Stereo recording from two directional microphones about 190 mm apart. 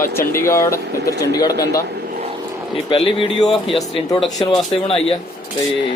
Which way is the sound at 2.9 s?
25° left (ahead or behind).